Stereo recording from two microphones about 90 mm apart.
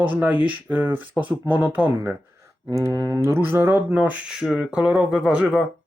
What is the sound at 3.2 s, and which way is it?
Speech, 30° right (ahead or behind).